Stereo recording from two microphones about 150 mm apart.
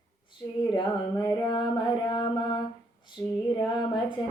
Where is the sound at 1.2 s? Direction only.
30° left (ahead or behind).